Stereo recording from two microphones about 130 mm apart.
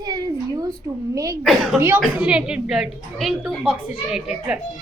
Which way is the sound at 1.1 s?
25° right (ahead or behind).